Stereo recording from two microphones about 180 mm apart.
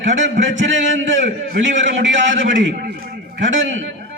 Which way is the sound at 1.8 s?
90° right.